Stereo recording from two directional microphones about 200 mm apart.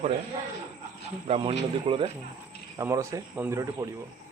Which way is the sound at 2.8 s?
15° right (ahead or behind).